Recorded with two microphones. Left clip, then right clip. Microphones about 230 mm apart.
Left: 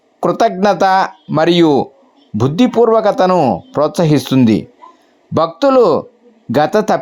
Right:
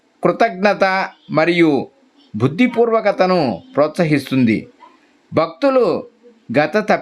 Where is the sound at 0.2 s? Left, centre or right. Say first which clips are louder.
Left 2 dB; centre.